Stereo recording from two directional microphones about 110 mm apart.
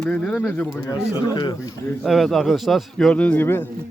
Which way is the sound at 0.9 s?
35° left (ahead or behind).